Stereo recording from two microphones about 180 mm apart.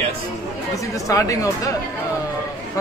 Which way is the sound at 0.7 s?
20° left (ahead or behind).